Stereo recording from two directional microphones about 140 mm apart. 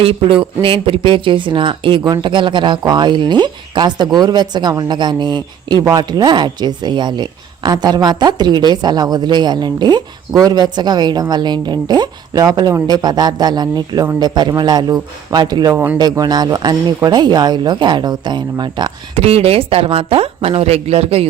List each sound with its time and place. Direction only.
0.0 s a woman's voice: 40° right (ahead or behind)
19.1 s speech: 45° right (ahead or behind)